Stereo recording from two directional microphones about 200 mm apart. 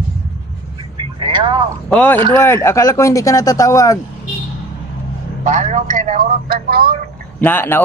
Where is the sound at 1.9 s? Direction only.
10° left (ahead or behind).